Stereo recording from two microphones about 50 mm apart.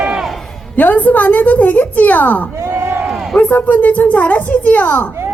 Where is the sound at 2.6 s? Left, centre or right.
Right.